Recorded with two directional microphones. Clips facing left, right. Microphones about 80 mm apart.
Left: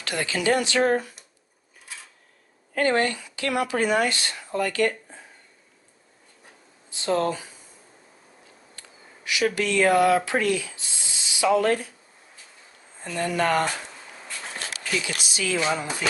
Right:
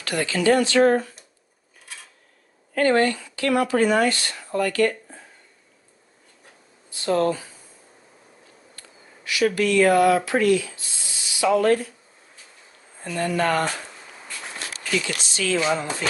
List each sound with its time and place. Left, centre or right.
0.0 s speech: left
2.7 s speech: left
6.9 s speech: left
8.7 s speech: left
13.1 s speech: left
14.7 s a sound: centre
15.2 s speech: centre